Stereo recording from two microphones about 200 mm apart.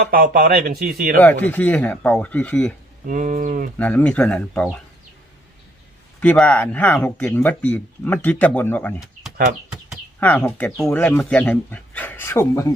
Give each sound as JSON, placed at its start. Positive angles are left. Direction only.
{"t": 0.1, "sound": "speech", "side_deg": -45}
{"t": 1.2, "sound": "speech", "side_deg": 10}
{"t": 3.1, "sound": "speech", "side_deg": -40}
{"t": 3.8, "sound": "speech", "side_deg": 5}
{"t": 6.1, "sound": "speech", "side_deg": 5}